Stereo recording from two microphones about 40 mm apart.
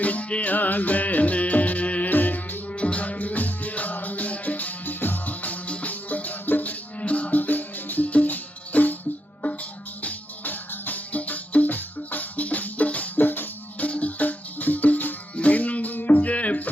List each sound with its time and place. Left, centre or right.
0.0 s music: left
0.5 s music: left
2.0 s music: left
2.7 s music: left
7.0 s music: left
10.0 s music: left
13.8 s music: left